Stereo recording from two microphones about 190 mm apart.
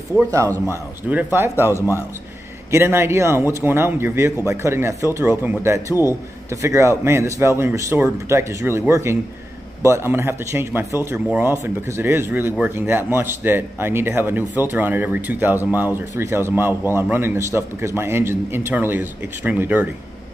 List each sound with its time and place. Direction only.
0.2 s speech: 15° right (ahead or behind)
1.7 s a man's voice: 15° left (ahead or behind)
2.7 s speech: 10° right (ahead or behind)